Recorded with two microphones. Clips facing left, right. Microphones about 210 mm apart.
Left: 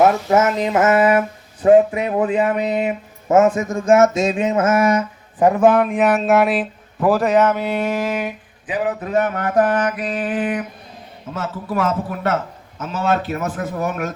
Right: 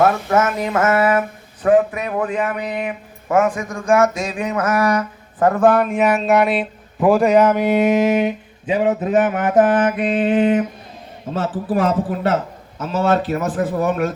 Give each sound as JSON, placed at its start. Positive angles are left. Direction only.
{"t": 0.0, "sound": "speech", "side_deg": 20}
{"t": 7.2, "sound": "a man's voice", "side_deg": -10}